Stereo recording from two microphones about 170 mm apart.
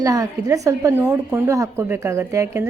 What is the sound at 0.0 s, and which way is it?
A woman's voice, 20° right (ahead or behind).